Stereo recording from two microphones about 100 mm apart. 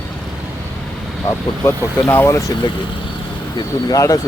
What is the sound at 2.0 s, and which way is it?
Speech, 15° left (ahead or behind).